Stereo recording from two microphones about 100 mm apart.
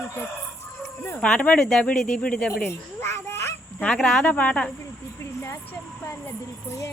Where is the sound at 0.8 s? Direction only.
30° left (ahead or behind).